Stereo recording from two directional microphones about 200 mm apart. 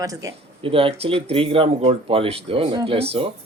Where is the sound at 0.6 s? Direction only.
25° right (ahead or behind).